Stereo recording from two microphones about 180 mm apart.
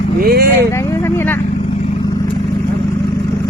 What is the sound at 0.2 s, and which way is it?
Speech, 60° right (ahead or behind).